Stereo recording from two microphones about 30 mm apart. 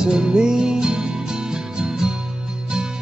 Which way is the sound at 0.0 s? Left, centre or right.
Right.